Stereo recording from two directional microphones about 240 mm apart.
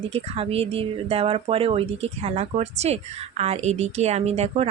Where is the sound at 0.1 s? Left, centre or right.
Right.